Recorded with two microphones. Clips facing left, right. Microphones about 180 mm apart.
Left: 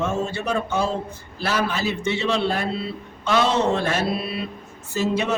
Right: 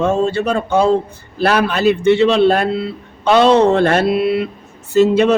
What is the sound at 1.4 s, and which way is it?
Speech, 65° right (ahead or behind).